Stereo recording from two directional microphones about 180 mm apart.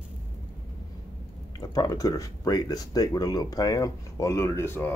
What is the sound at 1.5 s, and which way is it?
Speech, 20° left (ahead or behind).